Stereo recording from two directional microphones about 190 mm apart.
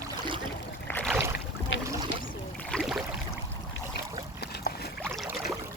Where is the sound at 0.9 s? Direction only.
10° left (ahead or behind).